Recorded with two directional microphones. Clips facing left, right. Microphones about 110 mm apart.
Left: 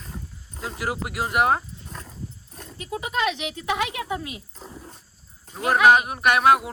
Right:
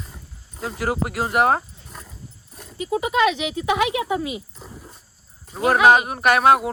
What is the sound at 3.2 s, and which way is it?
Speech, 10° right (ahead or behind).